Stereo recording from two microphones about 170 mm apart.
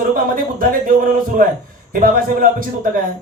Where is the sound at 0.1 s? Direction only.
55° right (ahead or behind).